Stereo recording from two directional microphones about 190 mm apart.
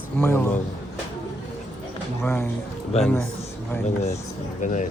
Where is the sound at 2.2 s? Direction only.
10° left (ahead or behind).